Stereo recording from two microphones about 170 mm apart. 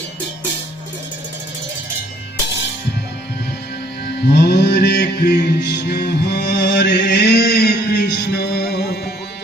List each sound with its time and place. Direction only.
4.4 s mantra: 70° left (ahead or behind)